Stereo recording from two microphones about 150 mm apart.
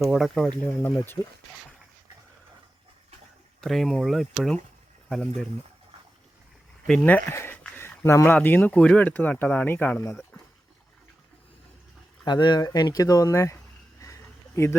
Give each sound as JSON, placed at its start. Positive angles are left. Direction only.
{"t": 0.0, "sound": "speech", "side_deg": 0}
{"t": 0.8, "sound": "speech", "side_deg": 15}
{"t": 3.6, "sound": "speech", "side_deg": 0}
{"t": 6.8, "sound": "speech", "side_deg": 10}
{"t": 10.3, "sound": "a sound", "side_deg": 15}
{"t": 12.2, "sound": "speech", "side_deg": 30}
{"t": 14.0, "sound": "a sound", "side_deg": 20}